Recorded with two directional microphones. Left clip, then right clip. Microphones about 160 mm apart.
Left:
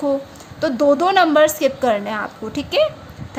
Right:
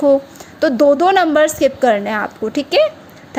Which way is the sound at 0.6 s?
30° right (ahead or behind).